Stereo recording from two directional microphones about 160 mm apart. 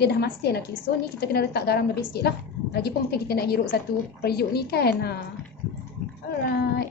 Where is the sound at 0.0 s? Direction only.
90° left.